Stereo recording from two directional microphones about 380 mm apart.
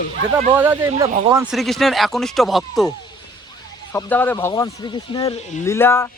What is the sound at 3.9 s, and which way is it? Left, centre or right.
Speech, centre.